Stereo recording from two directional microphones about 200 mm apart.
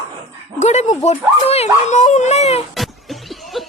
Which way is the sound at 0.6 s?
35° left (ahead or behind).